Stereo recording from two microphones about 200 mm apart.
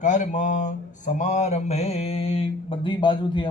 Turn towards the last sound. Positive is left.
turn(degrees=25)  # may be behind; listen again after turning